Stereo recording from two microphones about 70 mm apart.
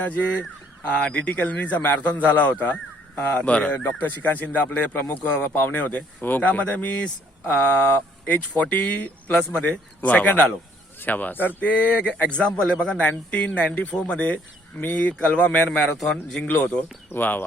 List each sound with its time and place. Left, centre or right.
0.0 s speech: left